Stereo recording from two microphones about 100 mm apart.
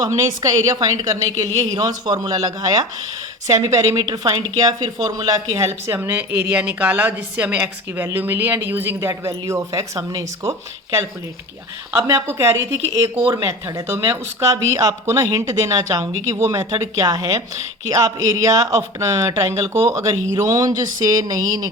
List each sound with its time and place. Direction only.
0.0 s a woman's voice: 30° right (ahead or behind)
11.9 s speech: 30° right (ahead or behind)